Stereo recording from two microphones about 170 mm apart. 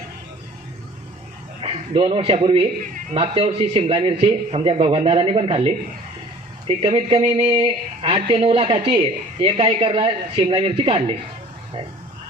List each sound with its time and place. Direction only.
1.6 s speech: 35° right (ahead or behind)